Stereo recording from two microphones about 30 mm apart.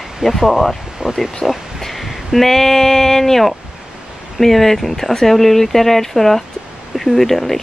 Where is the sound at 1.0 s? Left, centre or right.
Right.